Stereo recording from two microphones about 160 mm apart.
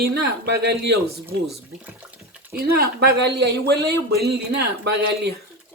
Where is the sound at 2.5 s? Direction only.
75° right (ahead or behind).